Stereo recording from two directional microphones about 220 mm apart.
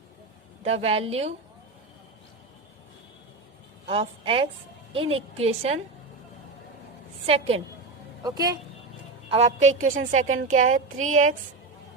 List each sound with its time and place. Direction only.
0.6 s a woman's voice: 25° right (ahead or behind)
3.8 s a woman's voice: 25° right (ahead or behind)
7.3 s a woman's voice: 25° right (ahead or behind)
9.3 s a sound: 30° right (ahead or behind)
10.2 s speech: 70° right (ahead or behind)
10.5 s a sound: 35° right (ahead or behind)